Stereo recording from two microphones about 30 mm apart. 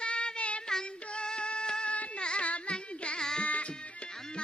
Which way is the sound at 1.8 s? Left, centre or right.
Left.